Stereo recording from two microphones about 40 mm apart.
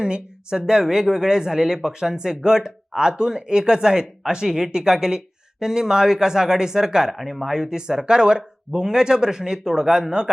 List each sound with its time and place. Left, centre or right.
0.0 s speech: centre
7.1 s speech: centre